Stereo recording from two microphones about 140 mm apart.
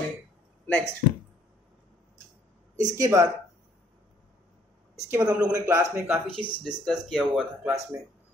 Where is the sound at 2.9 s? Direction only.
25° right (ahead or behind).